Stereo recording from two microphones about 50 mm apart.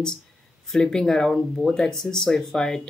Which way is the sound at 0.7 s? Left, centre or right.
Centre.